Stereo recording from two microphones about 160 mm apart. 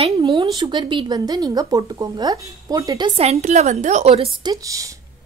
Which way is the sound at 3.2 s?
45° right (ahead or behind).